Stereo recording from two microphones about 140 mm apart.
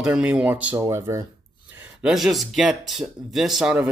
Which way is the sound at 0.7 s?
20° right (ahead or behind).